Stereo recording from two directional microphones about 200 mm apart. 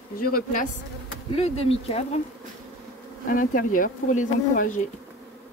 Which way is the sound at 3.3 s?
45° left (ahead or behind).